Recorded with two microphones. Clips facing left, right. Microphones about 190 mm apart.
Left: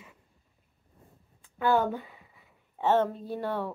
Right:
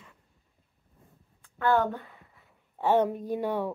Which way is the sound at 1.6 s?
5° left (ahead or behind).